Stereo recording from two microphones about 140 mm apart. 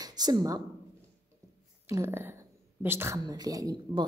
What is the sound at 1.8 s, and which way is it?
Speech, 20° right (ahead or behind).